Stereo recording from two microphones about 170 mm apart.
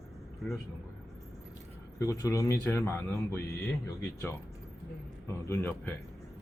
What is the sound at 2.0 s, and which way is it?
Speech, 20° left (ahead or behind).